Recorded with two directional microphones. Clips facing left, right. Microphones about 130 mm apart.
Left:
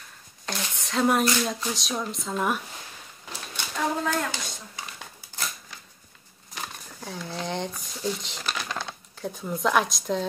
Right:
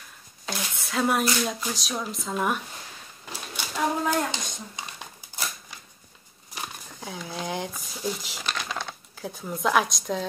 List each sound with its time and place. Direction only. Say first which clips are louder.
0.5 s speech: even; 5° right (ahead or behind)
3.5 s a sound: right 1 dB; 5° right (ahead or behind)
4.2 s dishes: right 2 dB; 20° right (ahead or behind)
6.5 s speech: even; 10° right (ahead or behind)